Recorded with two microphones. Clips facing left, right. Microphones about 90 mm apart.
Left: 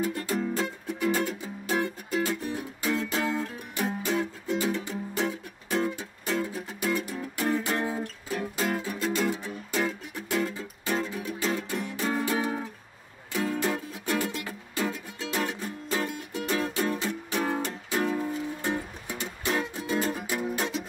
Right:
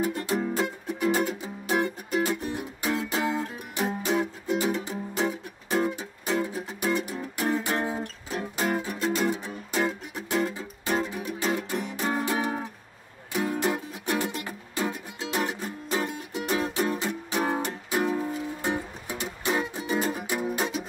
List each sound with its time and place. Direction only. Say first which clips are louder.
0.0 s music: right 2 dB; 15° right (ahead or behind)